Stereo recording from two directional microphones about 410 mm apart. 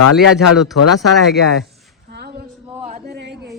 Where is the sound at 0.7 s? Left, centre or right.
Left.